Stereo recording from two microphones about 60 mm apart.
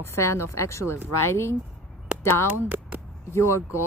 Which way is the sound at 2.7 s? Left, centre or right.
Right.